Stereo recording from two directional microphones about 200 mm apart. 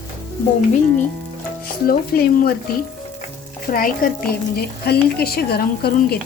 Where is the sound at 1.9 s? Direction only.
50° left (ahead or behind).